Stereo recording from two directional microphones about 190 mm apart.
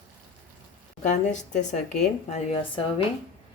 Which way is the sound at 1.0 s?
40° left (ahead or behind).